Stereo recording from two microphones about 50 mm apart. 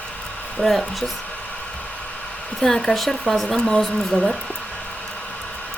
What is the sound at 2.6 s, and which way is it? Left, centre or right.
Speech, centre.